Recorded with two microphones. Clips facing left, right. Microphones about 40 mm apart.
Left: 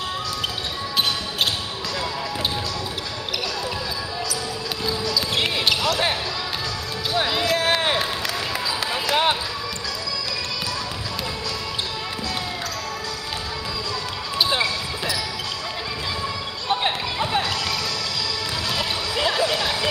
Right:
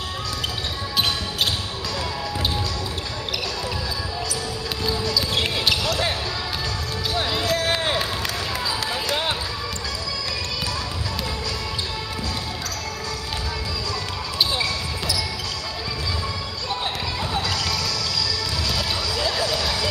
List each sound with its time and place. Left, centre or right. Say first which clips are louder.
7.2 s run: left 2 dB; centre
8.9 s basketball bounce: left 7 dB; left
14.5 s basketball bounce: left 2 dB; left
16.6 s basketball bounce: left 5 dB; left
18.7 s a sound: left 1 dB; left